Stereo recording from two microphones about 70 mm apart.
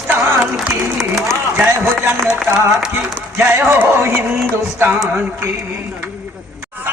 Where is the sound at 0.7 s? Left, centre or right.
Centre.